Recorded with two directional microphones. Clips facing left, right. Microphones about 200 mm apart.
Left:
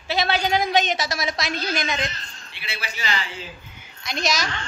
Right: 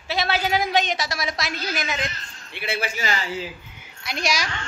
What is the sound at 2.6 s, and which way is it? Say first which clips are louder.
Speech: right 7 dB; 50° right (ahead or behind).